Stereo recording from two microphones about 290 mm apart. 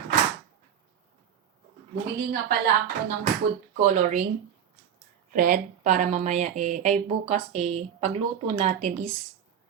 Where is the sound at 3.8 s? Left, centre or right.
Right.